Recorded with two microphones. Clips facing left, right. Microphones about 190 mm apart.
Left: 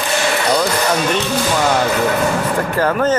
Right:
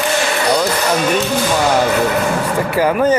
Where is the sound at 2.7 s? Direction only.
10° right (ahead or behind).